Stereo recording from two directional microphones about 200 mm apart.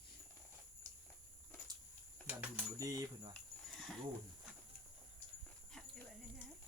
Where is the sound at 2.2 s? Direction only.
10° right (ahead or behind).